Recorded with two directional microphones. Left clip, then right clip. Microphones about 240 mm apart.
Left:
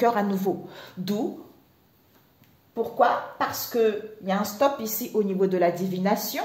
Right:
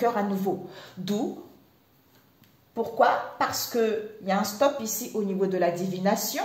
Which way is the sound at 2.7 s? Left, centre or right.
Centre.